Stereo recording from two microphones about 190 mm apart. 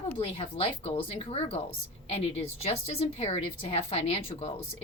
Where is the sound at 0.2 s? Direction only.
30° left (ahead or behind).